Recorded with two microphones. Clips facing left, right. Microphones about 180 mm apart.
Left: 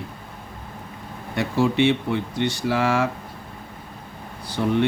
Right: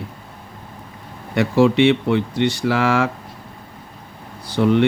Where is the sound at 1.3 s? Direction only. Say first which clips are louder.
Right 6 dB; 90° right.